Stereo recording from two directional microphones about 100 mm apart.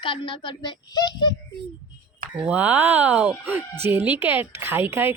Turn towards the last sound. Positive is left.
turn(degrees=-20)  # may be behind; listen again after turning